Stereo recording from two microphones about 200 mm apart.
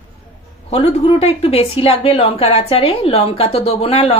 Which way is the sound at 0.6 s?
30° left (ahead or behind).